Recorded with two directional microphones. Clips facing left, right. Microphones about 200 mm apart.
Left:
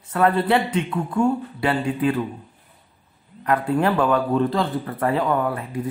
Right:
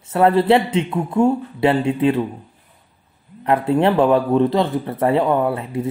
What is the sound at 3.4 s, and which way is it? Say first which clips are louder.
A man's voice: right 4 dB; 25° right (ahead or behind).